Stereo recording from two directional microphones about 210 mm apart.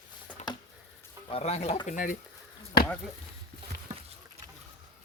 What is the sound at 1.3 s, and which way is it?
Speech, 30° left (ahead or behind).